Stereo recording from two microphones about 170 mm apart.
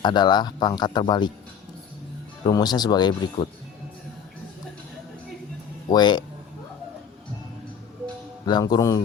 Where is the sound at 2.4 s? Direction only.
25° left (ahead or behind).